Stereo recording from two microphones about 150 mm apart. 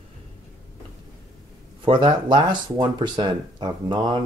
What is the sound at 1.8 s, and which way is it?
Speech, 30° right (ahead or behind).